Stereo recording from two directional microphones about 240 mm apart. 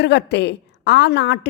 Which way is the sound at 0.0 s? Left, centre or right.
Left.